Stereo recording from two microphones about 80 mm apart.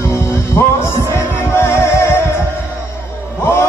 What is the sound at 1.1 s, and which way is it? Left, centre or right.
Music, left.